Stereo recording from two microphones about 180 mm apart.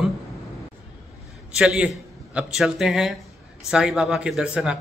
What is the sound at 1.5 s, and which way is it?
Speech, 5° right (ahead or behind).